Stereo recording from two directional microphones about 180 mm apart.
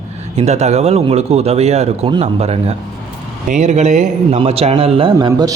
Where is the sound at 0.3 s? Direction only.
35° right (ahead or behind).